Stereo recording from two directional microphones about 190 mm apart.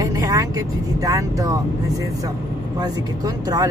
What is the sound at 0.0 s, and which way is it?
Speech, 20° right (ahead or behind).